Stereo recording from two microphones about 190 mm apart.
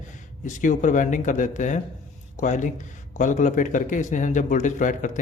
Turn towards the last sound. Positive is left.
turn(degrees=40)  # may be behind; listen again after turning